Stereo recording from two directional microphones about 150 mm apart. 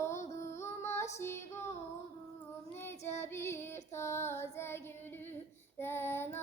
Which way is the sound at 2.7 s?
15° left (ahead or behind).